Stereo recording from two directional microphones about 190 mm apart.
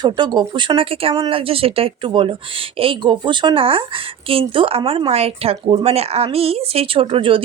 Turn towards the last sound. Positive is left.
turn(degrees=-25)  # may be behind; listen again after turning